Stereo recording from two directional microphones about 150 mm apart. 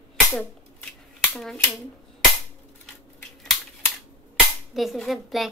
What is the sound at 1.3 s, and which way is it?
Speech, 5° left (ahead or behind).